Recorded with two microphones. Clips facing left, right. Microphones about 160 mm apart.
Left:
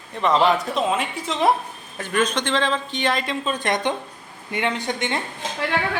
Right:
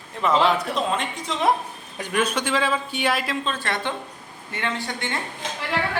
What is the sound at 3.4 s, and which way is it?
A man's voice, 15° left (ahead or behind).